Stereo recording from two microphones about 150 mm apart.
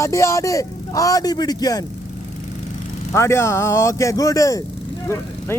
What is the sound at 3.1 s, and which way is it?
Speech, 20° left (ahead or behind).